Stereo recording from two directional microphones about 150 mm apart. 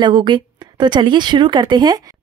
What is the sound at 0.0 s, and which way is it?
A woman's voice, 30° right (ahead or behind).